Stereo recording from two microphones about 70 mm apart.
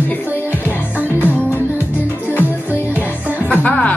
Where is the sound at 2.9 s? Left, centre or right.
Right.